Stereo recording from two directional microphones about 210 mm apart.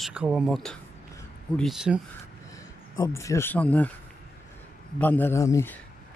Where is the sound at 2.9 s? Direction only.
15° left (ahead or behind).